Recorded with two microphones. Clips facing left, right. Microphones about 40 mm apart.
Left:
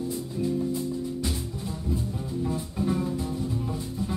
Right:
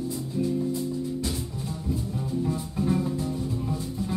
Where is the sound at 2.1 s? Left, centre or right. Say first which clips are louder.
Right 2 dB; centre.